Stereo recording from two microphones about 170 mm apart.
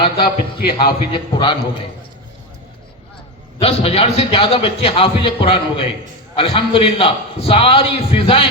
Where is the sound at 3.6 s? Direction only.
35° left (ahead or behind).